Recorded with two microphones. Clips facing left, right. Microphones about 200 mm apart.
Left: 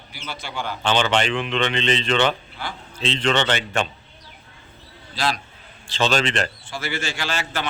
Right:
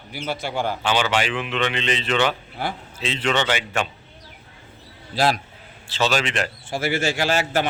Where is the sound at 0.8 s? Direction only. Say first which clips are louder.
Left 4 dB; 10° right (ahead or behind).